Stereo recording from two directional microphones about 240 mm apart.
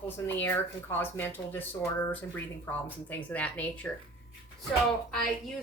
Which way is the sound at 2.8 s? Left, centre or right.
Centre.